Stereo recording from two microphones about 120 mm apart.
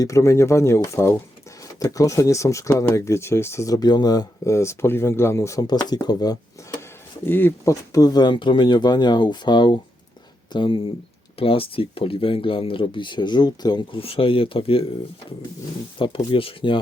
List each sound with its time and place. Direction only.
0.0 s speech: 25° left (ahead or behind)
5.6 s speech: 35° left (ahead or behind)
6.6 s a sound: 25° left (ahead or behind)
7.3 s speech: 20° left (ahead or behind); by 14.0 s 35° left (ahead or behind)
14.0 s speech: 50° left (ahead or behind)
16.0 s speech: 45° left (ahead or behind)